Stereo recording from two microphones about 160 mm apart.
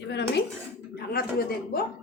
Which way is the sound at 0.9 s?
75° left (ahead or behind).